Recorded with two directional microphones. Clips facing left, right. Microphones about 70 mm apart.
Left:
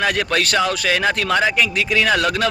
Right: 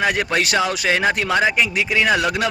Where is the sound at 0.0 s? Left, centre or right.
Centre.